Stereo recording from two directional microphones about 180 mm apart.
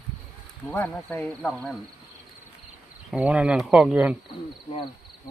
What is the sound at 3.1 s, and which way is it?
Speech, 5° right (ahead or behind).